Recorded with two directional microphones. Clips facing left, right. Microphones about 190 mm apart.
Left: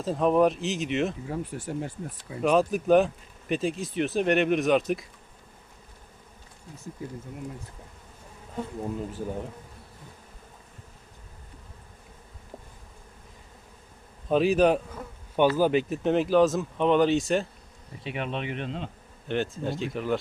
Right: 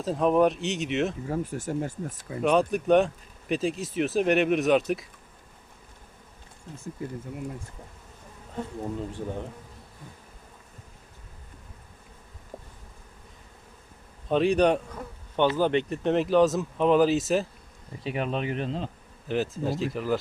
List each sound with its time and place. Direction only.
0.0 s speech: centre (ahead or behind)
1.3 s speech: 45° right (ahead or behind)
2.4 s speech: centre (ahead or behind)
9.0 s speech: 5° left (ahead or behind)
14.3 s speech: 5° left (ahead or behind)
18.0 s speech: 40° right (ahead or behind)
19.3 s speech: centre (ahead or behind)